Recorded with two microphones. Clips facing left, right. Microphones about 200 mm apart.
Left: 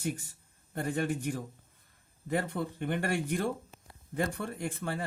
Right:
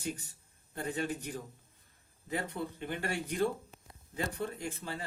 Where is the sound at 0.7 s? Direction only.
55° left (ahead or behind).